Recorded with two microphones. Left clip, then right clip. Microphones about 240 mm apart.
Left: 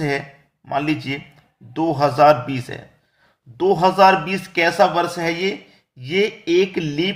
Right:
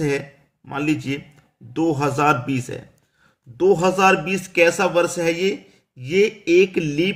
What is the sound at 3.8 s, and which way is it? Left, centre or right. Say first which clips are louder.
Speech: left 3 dB; centre.